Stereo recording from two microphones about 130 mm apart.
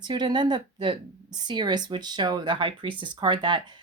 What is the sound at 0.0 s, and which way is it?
Speech, 35° right (ahead or behind).